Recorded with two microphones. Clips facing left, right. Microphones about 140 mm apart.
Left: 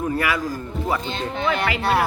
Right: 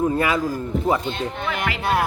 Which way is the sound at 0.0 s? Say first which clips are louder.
Right 3 dB; 25° right (ahead or behind).